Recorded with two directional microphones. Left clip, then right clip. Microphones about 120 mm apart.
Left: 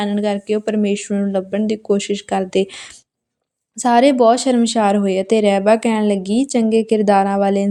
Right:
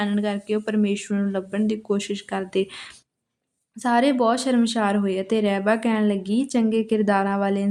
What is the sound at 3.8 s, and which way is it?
Speech, 45° left (ahead or behind).